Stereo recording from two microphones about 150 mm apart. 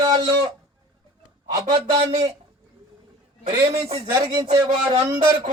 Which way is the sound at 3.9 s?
30° right (ahead or behind).